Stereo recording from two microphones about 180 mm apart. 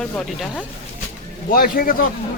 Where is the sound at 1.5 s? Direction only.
55° left (ahead or behind).